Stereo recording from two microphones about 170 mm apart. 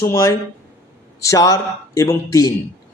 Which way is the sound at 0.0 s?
20° left (ahead or behind).